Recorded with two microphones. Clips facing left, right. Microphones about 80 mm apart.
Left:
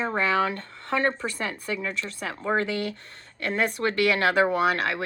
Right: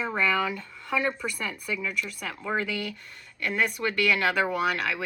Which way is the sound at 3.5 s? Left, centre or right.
Left.